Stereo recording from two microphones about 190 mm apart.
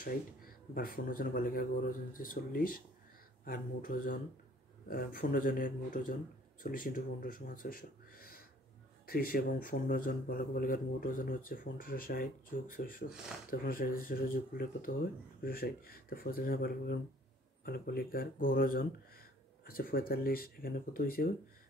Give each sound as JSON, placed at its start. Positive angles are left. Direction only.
{"t": 0.0, "sound": "speech", "side_deg": 50}